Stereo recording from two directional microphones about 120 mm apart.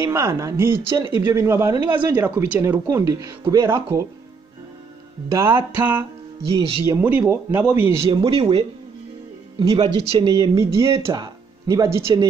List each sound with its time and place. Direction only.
0.0 s speech: 20° right (ahead or behind)
2.6 s speech: 25° right (ahead or behind)
5.3 s speech: 20° right (ahead or behind)
8.0 s speech: 45° right (ahead or behind)
10.3 s speech: 30° right (ahead or behind)
11.1 s speech: 35° right (ahead or behind)